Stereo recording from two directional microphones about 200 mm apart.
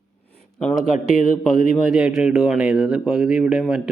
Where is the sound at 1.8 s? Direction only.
Centre (ahead or behind).